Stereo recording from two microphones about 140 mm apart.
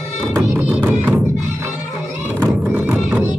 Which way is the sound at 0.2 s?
20° right (ahead or behind).